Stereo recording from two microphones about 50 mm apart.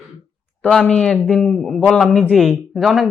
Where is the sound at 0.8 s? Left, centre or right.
Centre.